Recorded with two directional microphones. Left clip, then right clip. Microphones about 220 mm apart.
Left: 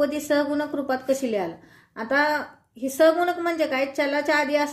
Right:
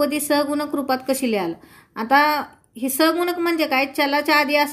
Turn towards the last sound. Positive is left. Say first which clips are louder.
# right 4 dB
turn(degrees=-45)  # may be behind; listen again after turning